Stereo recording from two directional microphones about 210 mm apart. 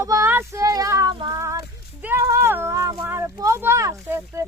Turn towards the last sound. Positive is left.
turn(degrees=-10)  # may be behind; listen again after turning